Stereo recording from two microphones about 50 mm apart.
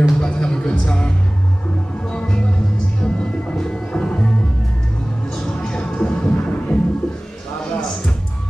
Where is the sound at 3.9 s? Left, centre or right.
Left.